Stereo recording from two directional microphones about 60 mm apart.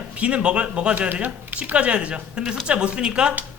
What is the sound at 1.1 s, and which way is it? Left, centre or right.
Speech, right.